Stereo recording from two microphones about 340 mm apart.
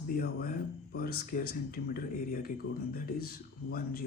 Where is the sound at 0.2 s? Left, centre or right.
Left.